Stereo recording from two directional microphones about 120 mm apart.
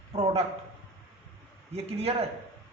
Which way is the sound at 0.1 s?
55° right (ahead or behind).